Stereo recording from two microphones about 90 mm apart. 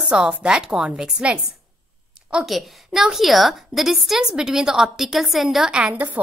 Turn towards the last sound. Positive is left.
turn(degrees=-15)  # may be behind; listen again after turning